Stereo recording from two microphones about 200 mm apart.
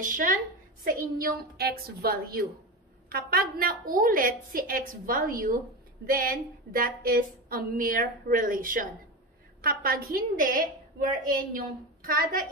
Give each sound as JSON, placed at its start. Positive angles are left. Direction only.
{"t": 0.0, "sound": "a woman's voice", "side_deg": -40}